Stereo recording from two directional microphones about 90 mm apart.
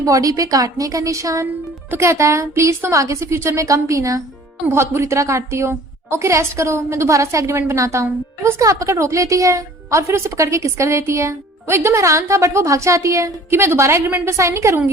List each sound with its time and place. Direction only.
0.0 s a woman's voice: 40° right (ahead or behind)